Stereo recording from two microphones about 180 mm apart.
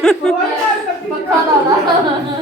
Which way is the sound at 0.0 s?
5° left (ahead or behind).